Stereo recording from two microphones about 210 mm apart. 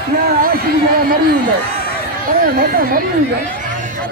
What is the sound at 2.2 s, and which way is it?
Speech, 45° right (ahead or behind).